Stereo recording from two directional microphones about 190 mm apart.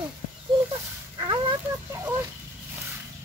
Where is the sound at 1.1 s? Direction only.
25° right (ahead or behind).